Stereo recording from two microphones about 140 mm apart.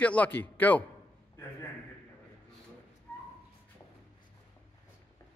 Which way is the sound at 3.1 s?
15° left (ahead or behind).